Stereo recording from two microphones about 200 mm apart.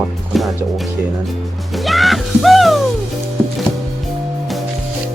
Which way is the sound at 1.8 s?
Centre (ahead or behind).